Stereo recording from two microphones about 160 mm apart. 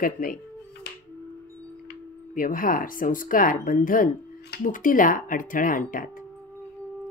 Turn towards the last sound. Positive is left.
turn(degrees=55)  # may be behind; listen again after turning